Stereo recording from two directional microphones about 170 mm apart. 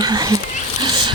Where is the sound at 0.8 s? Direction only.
25° right (ahead or behind).